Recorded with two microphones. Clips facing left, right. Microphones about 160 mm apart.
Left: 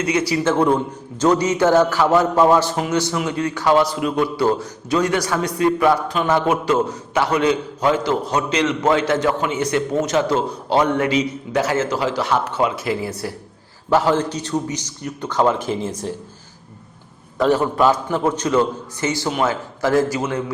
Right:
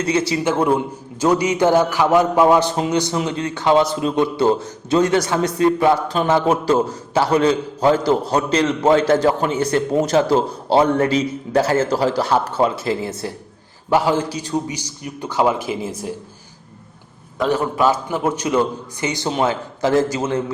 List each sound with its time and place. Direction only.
0.0 s a man's voice: 30° right (ahead or behind)
0.4 s a man's voice: 10° right (ahead or behind); by 13.3 s 25° right (ahead or behind)
13.9 s a man's voice: 10° right (ahead or behind)
17.3 s a man's voice: centre (ahead or behind); by 20.4 s 25° right (ahead or behind)